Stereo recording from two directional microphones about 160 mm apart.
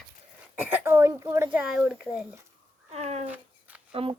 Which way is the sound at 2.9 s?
40° right (ahead or behind).